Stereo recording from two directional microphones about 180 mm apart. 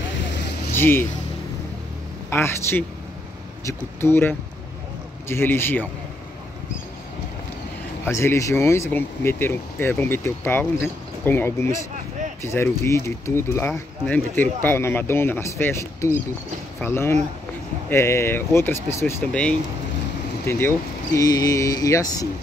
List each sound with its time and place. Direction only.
0.7 s speech: 10° left (ahead or behind)
2.2 s speech: 15° left (ahead or behind)
8.0 s speech: 15° left (ahead or behind)